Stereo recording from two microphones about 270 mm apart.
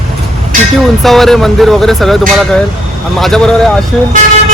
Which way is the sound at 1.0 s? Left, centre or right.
Centre.